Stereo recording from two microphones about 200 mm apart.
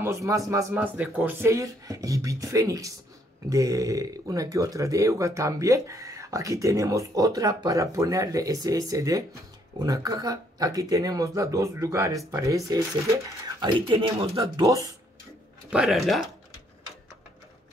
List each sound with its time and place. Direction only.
0.0 s speech: 15° right (ahead or behind)
15.7 s speech: centre (ahead or behind)